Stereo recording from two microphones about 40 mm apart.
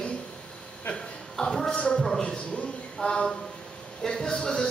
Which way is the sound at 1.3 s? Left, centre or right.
Centre.